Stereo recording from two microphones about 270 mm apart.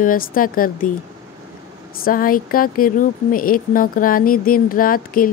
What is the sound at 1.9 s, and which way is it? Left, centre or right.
Speech, left.